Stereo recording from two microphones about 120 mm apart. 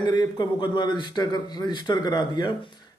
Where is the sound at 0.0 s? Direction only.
35° left (ahead or behind).